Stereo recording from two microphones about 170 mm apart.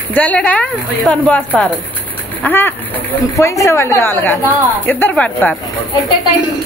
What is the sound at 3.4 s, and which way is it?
A woman's voice, 15° left (ahead or behind).